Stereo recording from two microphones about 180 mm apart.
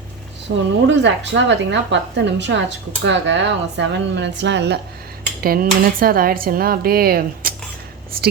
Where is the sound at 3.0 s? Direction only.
90° right; by 4.7 s 75° right (ahead or behind).